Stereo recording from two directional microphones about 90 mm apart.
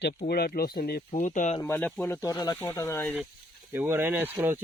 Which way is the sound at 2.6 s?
30° left (ahead or behind).